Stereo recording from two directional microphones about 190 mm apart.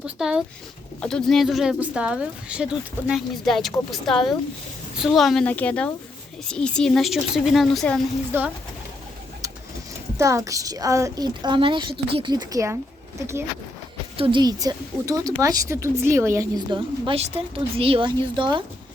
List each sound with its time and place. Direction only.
0.0 s speech: 5° right (ahead or behind)
8.3 s speech: 10° right (ahead or behind)
10.2 s a woman's voice: 15° right (ahead or behind)
14.2 s a woman's voice: 25° right (ahead or behind)